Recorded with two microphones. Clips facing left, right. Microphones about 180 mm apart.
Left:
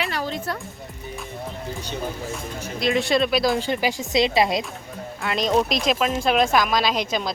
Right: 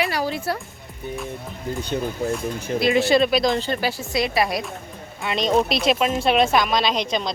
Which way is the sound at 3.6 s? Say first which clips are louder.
Left 1 dB; 15° left (ahead or behind).